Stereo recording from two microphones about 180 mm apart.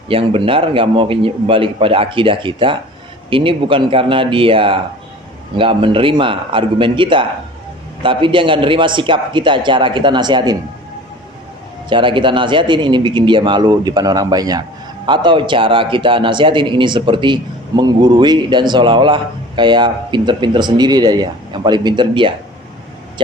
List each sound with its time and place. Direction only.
0.1 s a man's voice: 30° right (ahead or behind)
11.9 s a man's voice: 25° right (ahead or behind)